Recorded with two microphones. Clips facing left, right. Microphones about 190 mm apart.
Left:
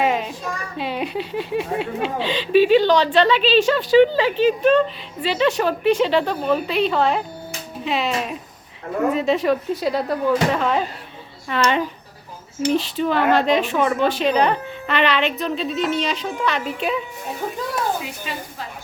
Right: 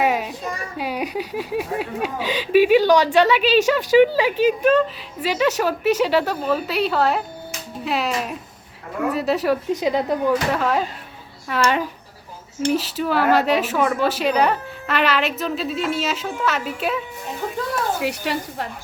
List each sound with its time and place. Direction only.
0.0 s a sound: 5° right (ahead or behind)
0.4 s a child's voice: 10° right (ahead or behind)
10.5 s a woman's voice: 5° right (ahead or behind)
18.0 s a woman's voice: 75° right (ahead or behind)